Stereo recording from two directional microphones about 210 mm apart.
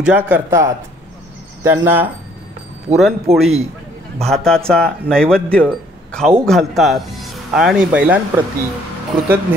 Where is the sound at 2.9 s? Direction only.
30° right (ahead or behind).